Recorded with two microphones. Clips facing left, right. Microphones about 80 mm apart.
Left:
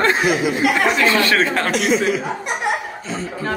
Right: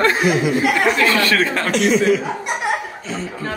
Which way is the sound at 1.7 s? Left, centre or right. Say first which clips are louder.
Right 6 dB; centre.